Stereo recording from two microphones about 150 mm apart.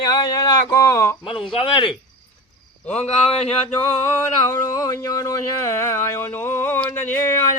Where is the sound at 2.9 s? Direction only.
45° left (ahead or behind).